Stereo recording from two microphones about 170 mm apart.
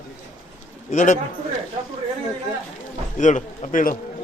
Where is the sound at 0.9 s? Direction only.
45° left (ahead or behind).